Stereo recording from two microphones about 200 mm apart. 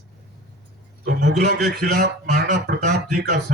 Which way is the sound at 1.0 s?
55° right (ahead or behind).